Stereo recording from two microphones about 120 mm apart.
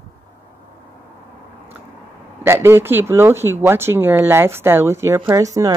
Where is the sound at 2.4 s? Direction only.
20° right (ahead or behind).